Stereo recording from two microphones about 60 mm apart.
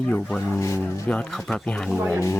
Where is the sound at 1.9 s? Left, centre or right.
Centre.